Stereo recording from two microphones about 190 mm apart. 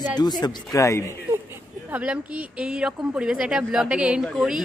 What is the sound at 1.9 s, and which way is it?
A woman's voice, 5° right (ahead or behind).